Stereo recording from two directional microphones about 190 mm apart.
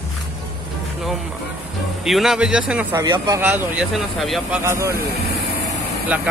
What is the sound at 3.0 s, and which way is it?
Speech, 20° right (ahead or behind).